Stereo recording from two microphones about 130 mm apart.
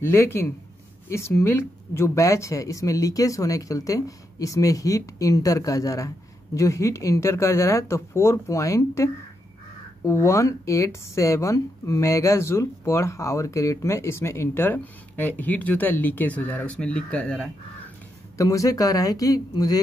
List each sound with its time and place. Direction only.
0.0 s speech: 20° left (ahead or behind)
18.4 s speech: 25° left (ahead or behind)